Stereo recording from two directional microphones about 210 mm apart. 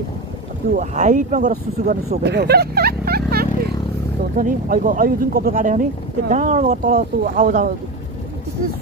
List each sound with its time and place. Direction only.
0.7 s speech: 35° right (ahead or behind)